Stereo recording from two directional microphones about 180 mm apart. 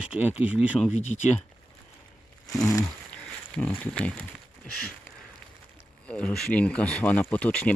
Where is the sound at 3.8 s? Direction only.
5° left (ahead or behind).